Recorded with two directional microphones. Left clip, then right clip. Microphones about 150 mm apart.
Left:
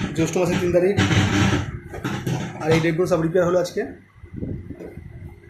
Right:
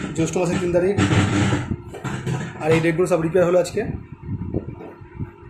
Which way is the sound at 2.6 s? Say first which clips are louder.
Right 2 dB; 15° right (ahead or behind).